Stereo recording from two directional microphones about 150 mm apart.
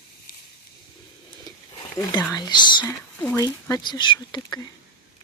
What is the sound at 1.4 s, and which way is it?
Roaring cats, 25° left (ahead or behind).